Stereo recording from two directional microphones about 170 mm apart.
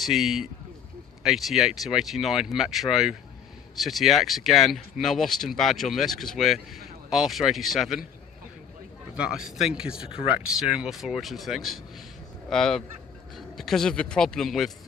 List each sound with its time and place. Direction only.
0.0 s speech: centre (ahead or behind)
9.1 s speech: 5° right (ahead or behind)
10.1 s speech: 35° left (ahead or behind)
10.4 s speech: 5° right (ahead or behind)